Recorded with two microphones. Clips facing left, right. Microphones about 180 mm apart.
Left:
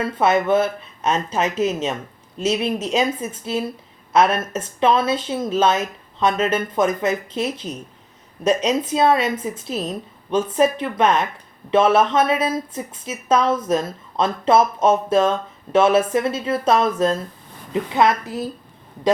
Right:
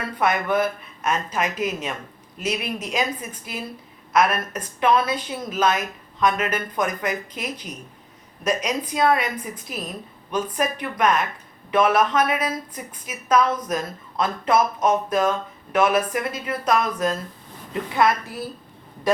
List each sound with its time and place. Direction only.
0.0 s a woman's voice: 25° left (ahead or behind)